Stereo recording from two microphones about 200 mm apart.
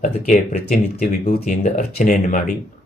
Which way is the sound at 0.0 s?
35° left (ahead or behind).